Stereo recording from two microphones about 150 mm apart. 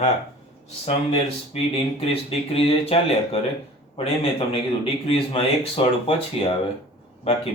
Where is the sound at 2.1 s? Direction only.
40° left (ahead or behind).